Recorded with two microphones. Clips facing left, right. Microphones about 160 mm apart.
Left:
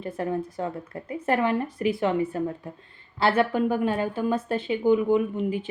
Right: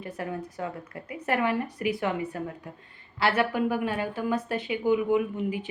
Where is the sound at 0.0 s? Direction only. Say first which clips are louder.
Left 6 dB; 30° left (ahead or behind).